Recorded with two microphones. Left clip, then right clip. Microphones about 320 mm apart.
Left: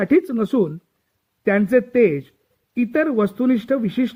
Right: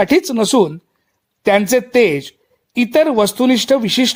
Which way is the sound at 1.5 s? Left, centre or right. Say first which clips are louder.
Right 4 dB; right.